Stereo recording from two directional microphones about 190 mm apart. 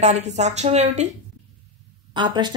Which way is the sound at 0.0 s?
35° right (ahead or behind).